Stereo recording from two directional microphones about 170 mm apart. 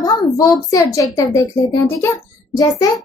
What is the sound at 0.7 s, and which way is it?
Speech, 20° left (ahead or behind).